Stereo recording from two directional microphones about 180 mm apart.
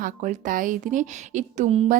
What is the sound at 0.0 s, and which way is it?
A woman's voice, 50° right (ahead or behind).